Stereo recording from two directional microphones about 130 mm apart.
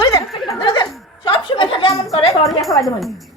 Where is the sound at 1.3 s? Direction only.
40° left (ahead or behind).